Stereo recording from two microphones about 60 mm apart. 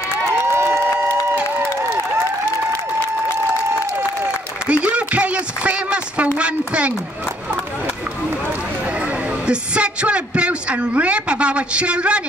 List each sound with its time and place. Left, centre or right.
0.6 s applause: right
4.6 s a sound: centre
6.3 s a woman's voice: centre
9.5 s a woman's voice: centre